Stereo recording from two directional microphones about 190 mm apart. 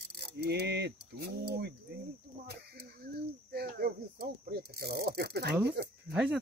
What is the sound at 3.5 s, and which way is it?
Pulleys, 55° right (ahead or behind).